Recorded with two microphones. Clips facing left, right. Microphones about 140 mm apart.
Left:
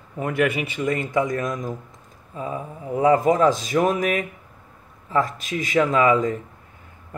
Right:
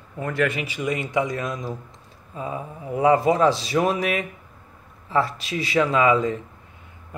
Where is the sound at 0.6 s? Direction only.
50° left (ahead or behind).